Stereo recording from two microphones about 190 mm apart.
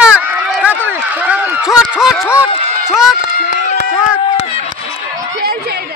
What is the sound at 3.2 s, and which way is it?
Run, 45° left (ahead or behind).